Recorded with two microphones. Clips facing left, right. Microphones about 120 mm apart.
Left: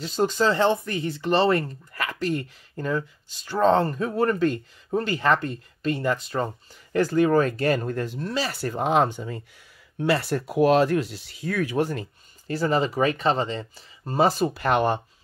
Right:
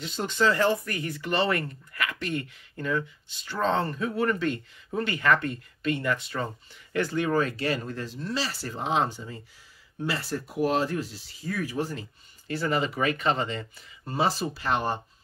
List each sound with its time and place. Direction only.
0.0 s speech: 40° left (ahead or behind); by 12.1 s 60° left (ahead or behind)
12.4 s speech: 40° left (ahead or behind); by 15.0 s 60° left (ahead or behind)